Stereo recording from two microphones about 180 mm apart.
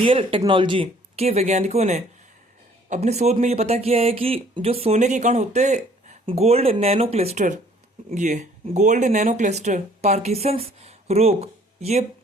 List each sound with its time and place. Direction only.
0.0 s speech: 30° right (ahead or behind)